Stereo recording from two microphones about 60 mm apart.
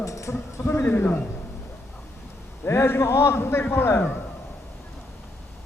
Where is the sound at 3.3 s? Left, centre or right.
Left.